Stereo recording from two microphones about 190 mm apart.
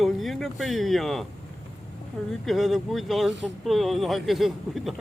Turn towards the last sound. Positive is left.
turn(degrees=0)  # may be behind; listen again after turning